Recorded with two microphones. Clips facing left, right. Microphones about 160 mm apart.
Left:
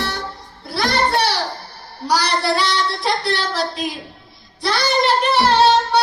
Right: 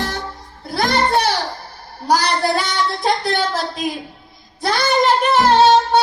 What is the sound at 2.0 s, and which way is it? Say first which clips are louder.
Speech: right 2 dB; 45° right (ahead or behind).